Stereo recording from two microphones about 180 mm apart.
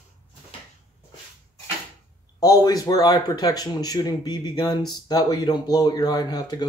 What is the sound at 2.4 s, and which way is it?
Speech, 20° left (ahead or behind).